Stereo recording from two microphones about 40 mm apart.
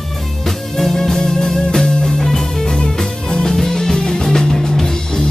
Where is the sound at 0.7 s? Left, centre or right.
Centre.